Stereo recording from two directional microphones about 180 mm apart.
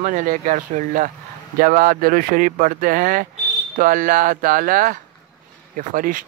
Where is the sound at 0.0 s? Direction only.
45° right (ahead or behind).